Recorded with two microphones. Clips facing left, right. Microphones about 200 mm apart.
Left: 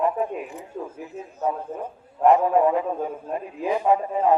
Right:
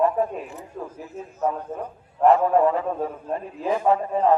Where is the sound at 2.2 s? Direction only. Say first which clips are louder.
Even; 15° left (ahead or behind).